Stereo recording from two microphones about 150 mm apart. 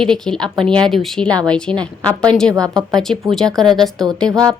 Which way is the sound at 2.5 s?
25° right (ahead or behind).